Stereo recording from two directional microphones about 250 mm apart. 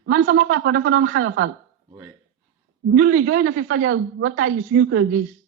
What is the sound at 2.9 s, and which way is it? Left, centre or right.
Speech, right.